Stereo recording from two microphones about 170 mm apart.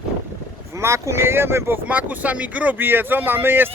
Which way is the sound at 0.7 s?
15° right (ahead or behind).